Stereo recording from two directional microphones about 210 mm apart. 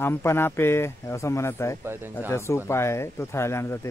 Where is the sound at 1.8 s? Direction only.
10° right (ahead or behind).